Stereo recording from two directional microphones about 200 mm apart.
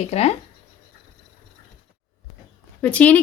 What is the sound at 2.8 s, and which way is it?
Speech, 5° left (ahead or behind).